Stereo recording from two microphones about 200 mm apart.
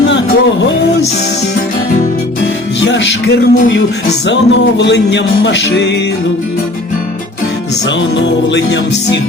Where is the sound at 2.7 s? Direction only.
65° left (ahead or behind).